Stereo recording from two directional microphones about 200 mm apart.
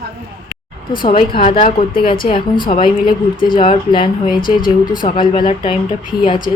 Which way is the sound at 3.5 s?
25° left (ahead or behind).